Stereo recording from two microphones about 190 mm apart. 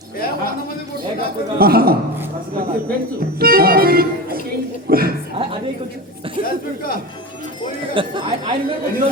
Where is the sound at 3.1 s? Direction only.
55° right (ahead or behind).